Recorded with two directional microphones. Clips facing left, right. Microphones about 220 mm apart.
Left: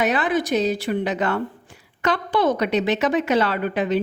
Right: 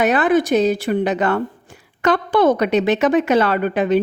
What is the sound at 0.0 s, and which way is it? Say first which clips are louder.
A woman's voice: right 5 dB; 50° right (ahead or behind).